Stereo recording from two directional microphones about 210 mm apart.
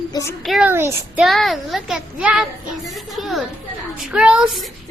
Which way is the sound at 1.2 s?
Centre (ahead or behind).